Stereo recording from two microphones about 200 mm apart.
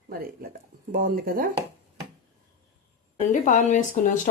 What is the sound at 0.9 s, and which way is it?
Speech, 45° right (ahead or behind).